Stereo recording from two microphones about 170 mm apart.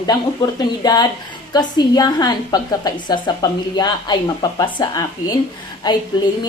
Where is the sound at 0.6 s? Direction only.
25° left (ahead or behind).